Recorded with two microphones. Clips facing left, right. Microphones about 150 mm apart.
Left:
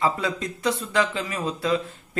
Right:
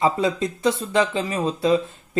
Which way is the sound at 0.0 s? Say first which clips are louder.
Right 4 dB; 25° right (ahead or behind).